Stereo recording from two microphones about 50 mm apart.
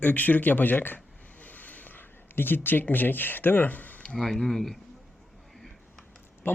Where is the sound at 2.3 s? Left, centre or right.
Left.